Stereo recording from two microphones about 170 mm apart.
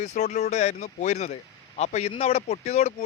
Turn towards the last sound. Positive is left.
turn(degrees=40)  # may be behind; listen again after turning